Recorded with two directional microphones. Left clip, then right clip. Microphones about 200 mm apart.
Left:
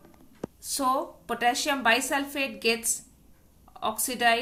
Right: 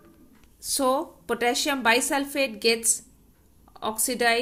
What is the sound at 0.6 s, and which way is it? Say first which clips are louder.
A woman's voice: right 2 dB; 15° right (ahead or behind).